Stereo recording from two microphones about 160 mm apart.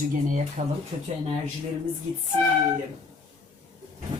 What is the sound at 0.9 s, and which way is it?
Speech, 40° right (ahead or behind).